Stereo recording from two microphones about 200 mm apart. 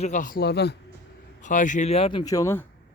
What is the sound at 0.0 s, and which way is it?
Speech, 40° left (ahead or behind).